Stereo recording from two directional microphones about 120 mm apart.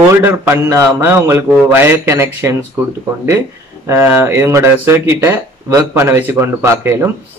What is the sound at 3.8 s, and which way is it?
Speech, 20° right (ahead or behind).